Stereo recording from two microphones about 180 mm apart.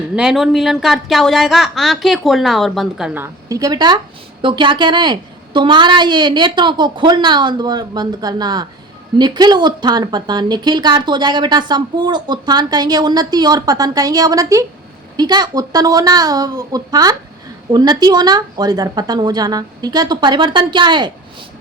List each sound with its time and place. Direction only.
0.2 s a woman's voice: centre (ahead or behind)
3.5 s a woman's voice: 20° right (ahead or behind)